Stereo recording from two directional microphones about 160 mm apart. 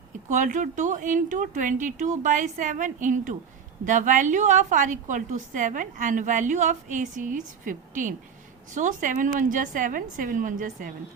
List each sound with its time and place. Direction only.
0.3 s a woman's voice: 50° right (ahead or behind)